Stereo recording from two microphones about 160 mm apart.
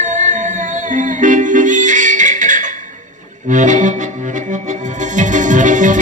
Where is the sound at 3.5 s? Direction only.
50° right (ahead or behind).